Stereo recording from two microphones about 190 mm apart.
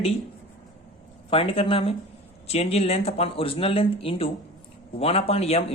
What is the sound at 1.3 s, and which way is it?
A man's voice, 30° left (ahead or behind).